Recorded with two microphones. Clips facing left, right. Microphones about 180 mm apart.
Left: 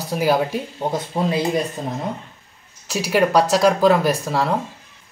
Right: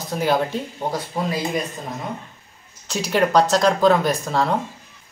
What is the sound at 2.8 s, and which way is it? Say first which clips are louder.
Speech: left 2 dB; 5° left (ahead or behind).